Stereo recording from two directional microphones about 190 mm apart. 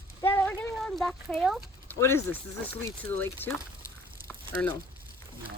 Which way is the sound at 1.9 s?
15° left (ahead or behind).